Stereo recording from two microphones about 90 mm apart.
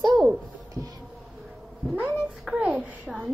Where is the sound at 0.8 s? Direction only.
35° right (ahead or behind).